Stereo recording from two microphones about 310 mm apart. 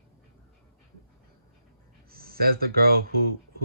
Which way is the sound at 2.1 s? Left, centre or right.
Right.